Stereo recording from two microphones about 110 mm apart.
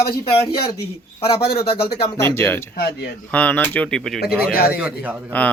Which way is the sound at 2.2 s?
20° left (ahead or behind).